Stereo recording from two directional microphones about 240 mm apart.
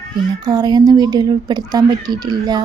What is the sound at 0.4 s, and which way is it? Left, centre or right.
Speech, centre.